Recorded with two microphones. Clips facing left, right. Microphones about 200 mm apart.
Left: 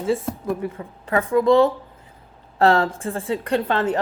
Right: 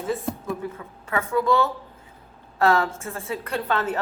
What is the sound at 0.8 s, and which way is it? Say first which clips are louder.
A woman's voice: left 5 dB; 35° left (ahead or behind).